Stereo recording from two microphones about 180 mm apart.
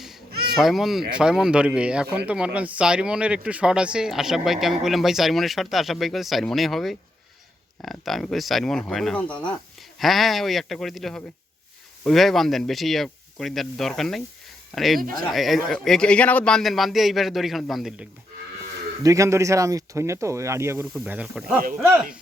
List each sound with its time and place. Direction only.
0.5 s speech: centre (ahead or behind)
19.0 s speech: 15° right (ahead or behind)
21.6 s speech: 50° right (ahead or behind)